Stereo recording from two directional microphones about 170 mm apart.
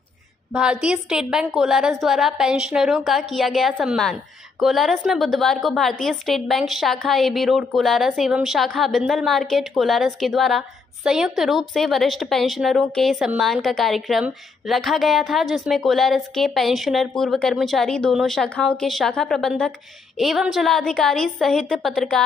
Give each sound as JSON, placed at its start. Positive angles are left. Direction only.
{"t": 0.6, "sound": "a woman's voice", "side_deg": -5}